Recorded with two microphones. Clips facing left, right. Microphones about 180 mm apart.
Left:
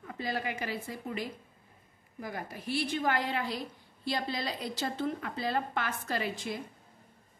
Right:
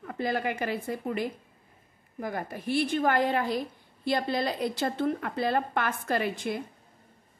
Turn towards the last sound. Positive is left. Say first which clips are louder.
# right 5 dB
turn(degrees=-55)  # may be behind; listen again after turning